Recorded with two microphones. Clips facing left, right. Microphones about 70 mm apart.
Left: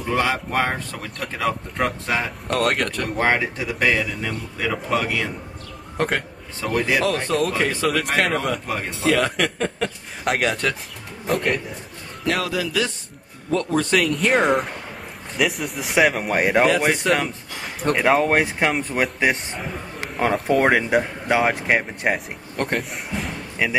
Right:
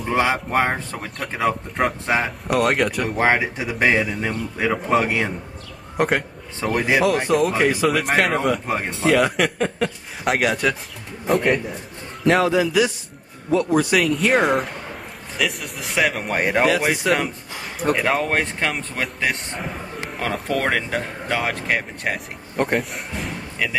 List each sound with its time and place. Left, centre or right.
0.1 s a man's voice: right
2.4 s a man's voice: centre; by 5.3 s right
5.9 s a man's voice: centre
8.6 s a man's voice: right
9.1 s speech: centre
12.3 s a man's voice: right
13.5 s a man's voice: centre
20.4 s speech: centre